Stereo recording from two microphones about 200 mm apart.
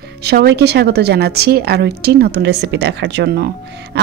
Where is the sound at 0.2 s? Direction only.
55° right (ahead or behind).